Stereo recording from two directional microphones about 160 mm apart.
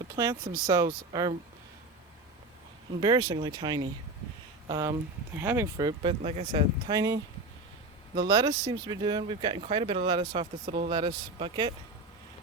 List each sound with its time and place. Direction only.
0.2 s speech: 20° right (ahead or behind)
3.0 s speech: 25° right (ahead or behind)
5.7 s speech: 30° right (ahead or behind)